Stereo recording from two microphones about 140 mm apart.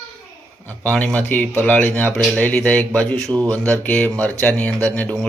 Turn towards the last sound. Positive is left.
turn(degrees=10)  # may be behind; listen again after turning